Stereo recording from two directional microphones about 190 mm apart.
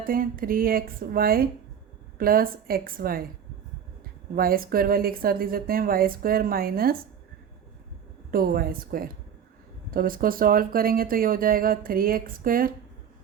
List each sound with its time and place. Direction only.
0.0 s speech: 50° right (ahead or behind)
4.4 s speech: 50° right (ahead or behind)
8.3 s speech: 50° right (ahead or behind)